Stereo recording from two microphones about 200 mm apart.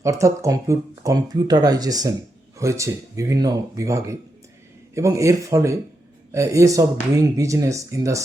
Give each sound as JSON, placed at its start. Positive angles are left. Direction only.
{"t": 0.0, "sound": "speech", "side_deg": -15}